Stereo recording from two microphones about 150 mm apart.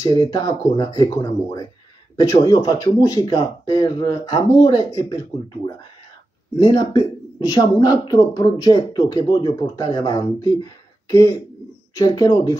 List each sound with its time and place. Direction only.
0.0 s a woman's voice: 25° left (ahead or behind)
6.6 s a woman's voice: 25° left (ahead or behind)